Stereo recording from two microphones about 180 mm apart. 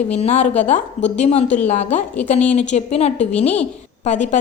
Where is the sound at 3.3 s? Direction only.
10° left (ahead or behind).